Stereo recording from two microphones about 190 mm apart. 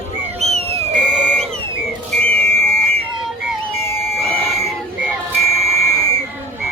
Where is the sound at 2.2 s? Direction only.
10° left (ahead or behind).